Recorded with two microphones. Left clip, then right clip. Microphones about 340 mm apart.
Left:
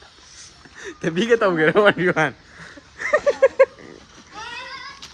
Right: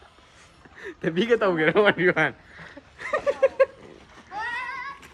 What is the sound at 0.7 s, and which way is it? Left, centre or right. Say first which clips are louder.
Speech: left 2 dB; left.